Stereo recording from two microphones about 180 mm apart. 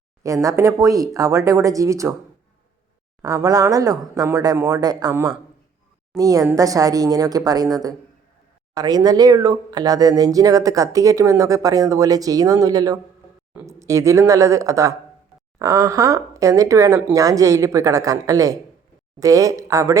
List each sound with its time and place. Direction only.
0.4 s speech: 20° right (ahead or behind)
3.2 s speech: 20° right (ahead or behind)